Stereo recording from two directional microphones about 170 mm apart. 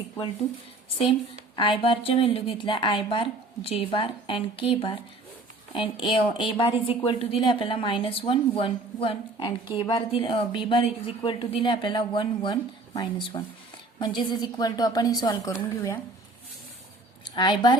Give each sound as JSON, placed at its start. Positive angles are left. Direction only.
{"t": 1.5, "sound": "a woman's voice", "side_deg": 30}
{"t": 17.3, "sound": "a woman's voice", "side_deg": 25}